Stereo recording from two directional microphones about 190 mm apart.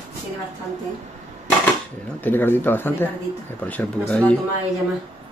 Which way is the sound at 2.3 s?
10° left (ahead or behind).